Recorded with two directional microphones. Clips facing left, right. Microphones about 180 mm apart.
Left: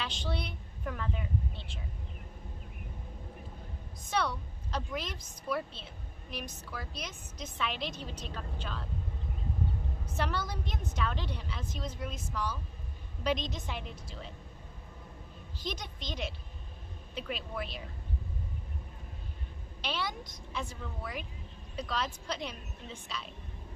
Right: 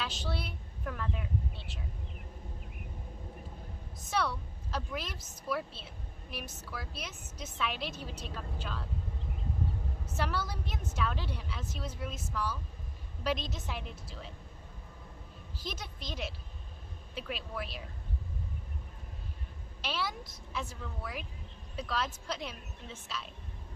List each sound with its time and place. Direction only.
0.0 s a woman's voice: 5° right (ahead or behind)
4.1 s a woman's voice: 5° right (ahead or behind)
10.2 s a woman's voice: 5° right (ahead or behind)
15.5 s a woman's voice: 5° right (ahead or behind)
19.8 s a woman's voice: 5° right (ahead or behind)